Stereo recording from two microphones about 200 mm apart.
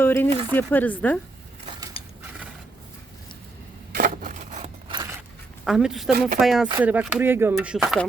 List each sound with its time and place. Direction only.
0.0 s a sound: 10° left (ahead or behind)
0.5 s speech: 10° left (ahead or behind)
3.9 s a sound: 40° right (ahead or behind)
4.9 s scissors: 20° right (ahead or behind)
5.6 s a woman's voice: centre (ahead or behind)
6.1 s speech: 45° right (ahead or behind)
6.4 s a woman's voice: centre (ahead or behind)